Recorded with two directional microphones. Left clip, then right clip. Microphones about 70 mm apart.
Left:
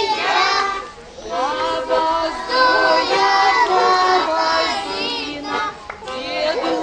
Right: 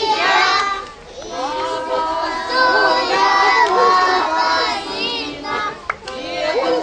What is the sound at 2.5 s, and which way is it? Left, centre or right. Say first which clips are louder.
Music: even; centre.